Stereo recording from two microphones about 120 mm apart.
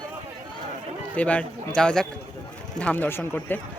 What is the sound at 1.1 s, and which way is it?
Speech, 10° left (ahead or behind).